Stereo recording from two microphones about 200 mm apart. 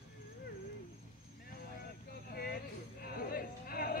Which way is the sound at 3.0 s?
50° left (ahead or behind).